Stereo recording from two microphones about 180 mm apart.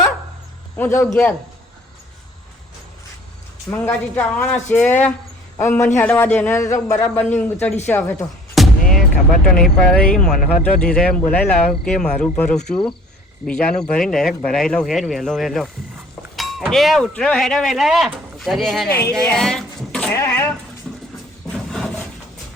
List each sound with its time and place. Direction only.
0.8 s speech: 15° left (ahead or behind)
3.7 s speech: 15° left (ahead or behind)
8.5 s music: centre (ahead or behind)
9.6 s speech: 5° left (ahead or behind)
20.1 s speech: 15° left (ahead or behind)
20.9 s a sound: centre (ahead or behind)